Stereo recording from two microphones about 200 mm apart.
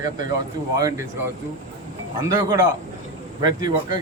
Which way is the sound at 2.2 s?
15° right (ahead or behind).